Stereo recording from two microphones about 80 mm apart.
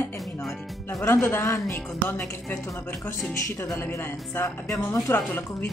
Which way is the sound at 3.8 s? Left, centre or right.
Left.